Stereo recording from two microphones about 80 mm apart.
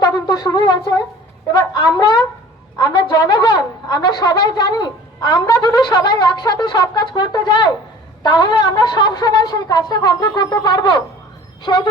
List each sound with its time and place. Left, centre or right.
0.0 s wind instrument: left
2.0 s a woman's voice: left
11.6 s speech: left